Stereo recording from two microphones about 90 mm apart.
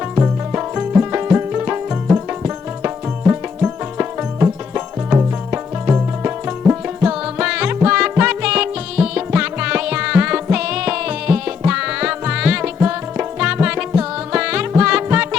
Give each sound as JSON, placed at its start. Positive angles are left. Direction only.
{"t": 0.8, "sound": "music", "side_deg": -20}
{"t": 7.0, "sound": "music", "side_deg": -10}